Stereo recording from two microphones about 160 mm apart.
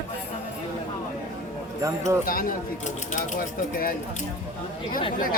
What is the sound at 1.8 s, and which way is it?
Speech, 20° right (ahead or behind).